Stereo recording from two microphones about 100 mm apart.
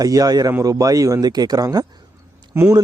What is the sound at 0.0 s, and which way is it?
Speech, 40° right (ahead or behind).